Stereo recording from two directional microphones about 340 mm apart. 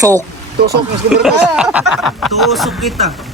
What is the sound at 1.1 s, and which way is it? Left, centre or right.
Speech, centre.